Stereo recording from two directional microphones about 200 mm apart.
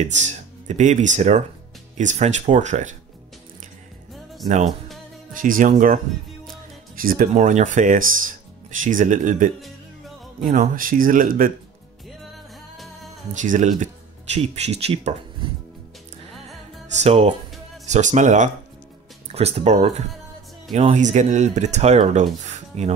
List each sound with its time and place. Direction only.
0.0 s speech: 35° right (ahead or behind)
4.6 s music: centre (ahead or behind)
5.3 s speech: 45° right (ahead or behind)
7.0 s speech: 45° right (ahead or behind)
12.7 s music: centre (ahead or behind)
13.3 s speech: 40° right (ahead or behind)
16.9 s speech: 35° right (ahead or behind)